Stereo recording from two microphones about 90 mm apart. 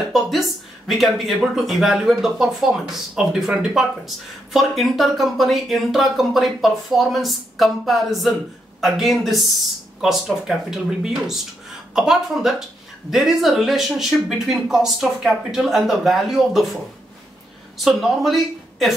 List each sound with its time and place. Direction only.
0.1 s speech: centre (ahead or behind)